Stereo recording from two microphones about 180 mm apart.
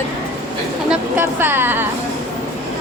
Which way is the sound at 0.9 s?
10° right (ahead or behind).